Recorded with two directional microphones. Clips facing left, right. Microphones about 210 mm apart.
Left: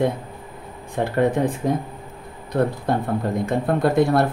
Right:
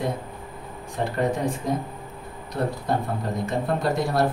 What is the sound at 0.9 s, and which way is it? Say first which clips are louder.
Speech: left 5 dB; 55° left (ahead or behind).